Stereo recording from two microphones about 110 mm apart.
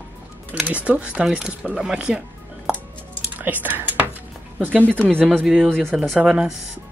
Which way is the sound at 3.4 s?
15° right (ahead or behind).